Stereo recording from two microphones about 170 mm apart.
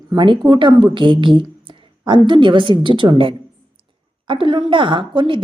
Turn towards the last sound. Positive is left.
turn(degrees=-30)  # may be behind; listen again after turning